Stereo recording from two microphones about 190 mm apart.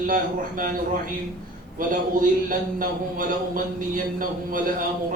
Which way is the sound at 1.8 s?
45° right (ahead or behind).